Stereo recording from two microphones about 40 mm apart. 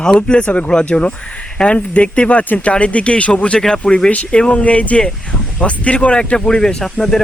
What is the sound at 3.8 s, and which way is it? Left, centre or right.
Speech, left.